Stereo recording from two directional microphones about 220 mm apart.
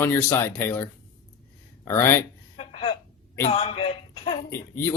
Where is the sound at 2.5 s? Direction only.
25° left (ahead or behind).